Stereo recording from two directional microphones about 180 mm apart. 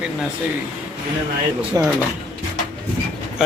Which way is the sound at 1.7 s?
20° right (ahead or behind).